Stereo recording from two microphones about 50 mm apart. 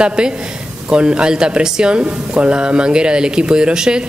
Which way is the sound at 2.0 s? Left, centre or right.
Right.